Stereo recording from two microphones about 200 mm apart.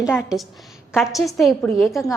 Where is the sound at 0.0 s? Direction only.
5° right (ahead or behind).